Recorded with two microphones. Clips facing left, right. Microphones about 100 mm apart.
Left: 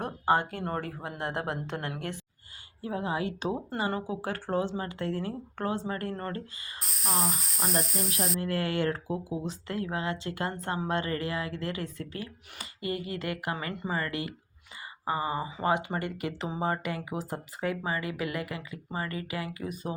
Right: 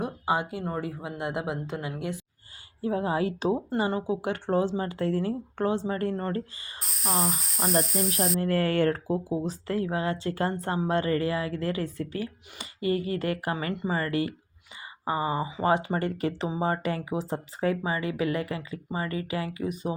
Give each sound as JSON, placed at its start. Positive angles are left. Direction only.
{"t": 0.0, "sound": "a sound", "side_deg": -10}
{"t": 0.6, "sound": "speech", "side_deg": -10}
{"t": 2.8, "sound": "speech", "side_deg": -30}
{"t": 6.7, "sound": "speech", "side_deg": 0}
{"t": 8.4, "sound": "speech", "side_deg": -40}